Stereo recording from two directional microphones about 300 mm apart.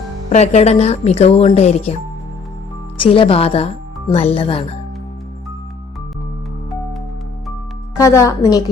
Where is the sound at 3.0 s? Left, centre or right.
Centre.